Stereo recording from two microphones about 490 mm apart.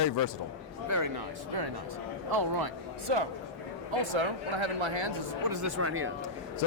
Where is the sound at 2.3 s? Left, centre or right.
Right.